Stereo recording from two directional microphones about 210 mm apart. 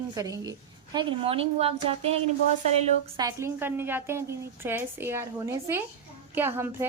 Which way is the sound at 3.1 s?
15° right (ahead or behind).